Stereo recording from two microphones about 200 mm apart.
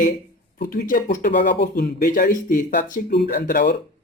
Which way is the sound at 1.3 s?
55° left (ahead or behind).